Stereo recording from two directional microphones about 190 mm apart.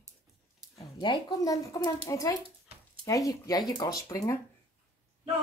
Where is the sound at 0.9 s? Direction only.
20° left (ahead or behind).